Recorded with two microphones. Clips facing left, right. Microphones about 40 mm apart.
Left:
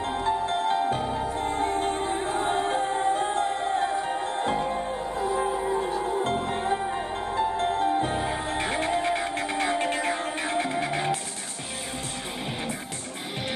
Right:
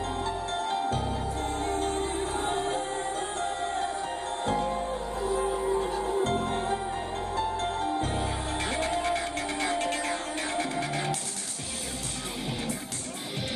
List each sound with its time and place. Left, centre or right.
0.0 s music: left
5.9 s music: left
6.2 s music: left